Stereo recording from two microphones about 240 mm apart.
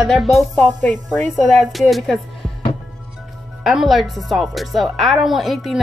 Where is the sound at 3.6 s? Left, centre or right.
Centre.